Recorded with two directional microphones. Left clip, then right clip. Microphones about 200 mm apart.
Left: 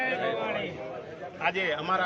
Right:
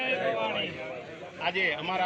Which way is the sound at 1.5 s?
5° left (ahead or behind).